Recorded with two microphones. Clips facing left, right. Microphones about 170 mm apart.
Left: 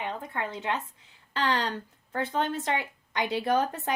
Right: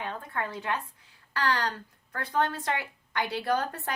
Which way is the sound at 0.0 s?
15° left (ahead or behind).